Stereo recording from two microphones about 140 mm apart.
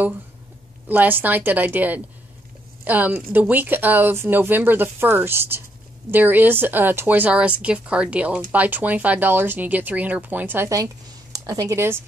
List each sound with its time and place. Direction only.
0.8 s a woman's voice: 15° right (ahead or behind)